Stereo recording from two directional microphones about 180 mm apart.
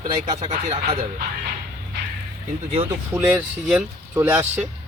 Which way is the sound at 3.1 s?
15° right (ahead or behind).